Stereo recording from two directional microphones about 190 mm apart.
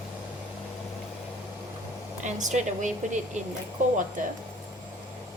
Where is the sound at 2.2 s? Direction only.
40° right (ahead or behind).